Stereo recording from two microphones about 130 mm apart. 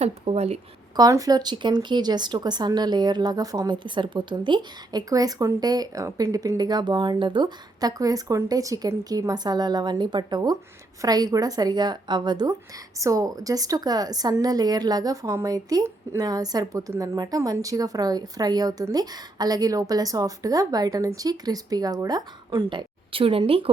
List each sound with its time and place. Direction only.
0.0 s speech: 55° right (ahead or behind)
0.9 s a woman's voice: 30° right (ahead or behind); by 23.6 s 45° right (ahead or behind)